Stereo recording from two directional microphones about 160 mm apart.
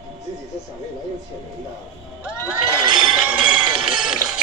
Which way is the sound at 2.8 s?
25° right (ahead or behind).